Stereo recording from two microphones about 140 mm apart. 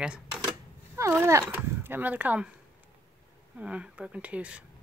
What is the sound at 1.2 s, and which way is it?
Speech, 15° right (ahead or behind).